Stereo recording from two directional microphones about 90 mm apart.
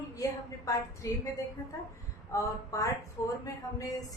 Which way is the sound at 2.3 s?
35° left (ahead or behind).